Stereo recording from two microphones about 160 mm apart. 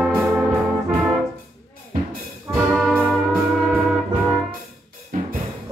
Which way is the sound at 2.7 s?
5° right (ahead or behind).